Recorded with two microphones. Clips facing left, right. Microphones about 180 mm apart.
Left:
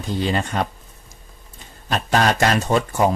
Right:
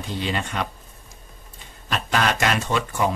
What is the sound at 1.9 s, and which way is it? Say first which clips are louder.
Speech: left 4 dB; 40° left (ahead or behind).